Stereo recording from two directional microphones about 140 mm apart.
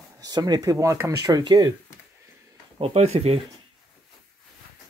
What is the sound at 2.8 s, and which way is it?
Speech, 50° right (ahead or behind).